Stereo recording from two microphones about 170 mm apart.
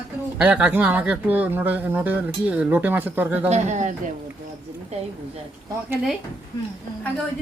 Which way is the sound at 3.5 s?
45° right (ahead or behind).